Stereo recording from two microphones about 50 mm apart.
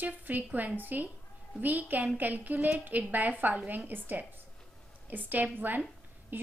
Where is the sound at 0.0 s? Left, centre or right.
Right.